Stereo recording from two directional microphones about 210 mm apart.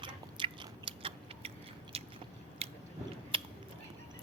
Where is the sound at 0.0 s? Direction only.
25° right (ahead or behind).